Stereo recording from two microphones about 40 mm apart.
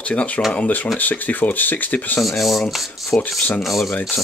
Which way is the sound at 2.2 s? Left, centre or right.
Centre.